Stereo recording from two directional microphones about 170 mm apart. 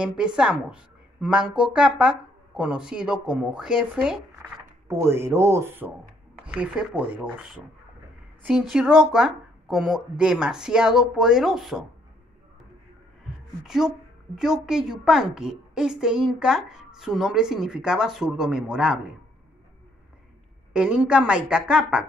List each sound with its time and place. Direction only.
0.0 s a woman's voice: 5° right (ahead or behind)
4.8 s a woman's voice: 15° right (ahead or behind)
13.7 s a woman's voice: 5° right (ahead or behind)
20.7 s a woman's voice: 5° right (ahead or behind)